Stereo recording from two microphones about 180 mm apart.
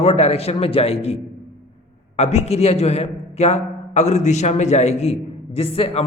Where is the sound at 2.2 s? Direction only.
35° left (ahead or behind).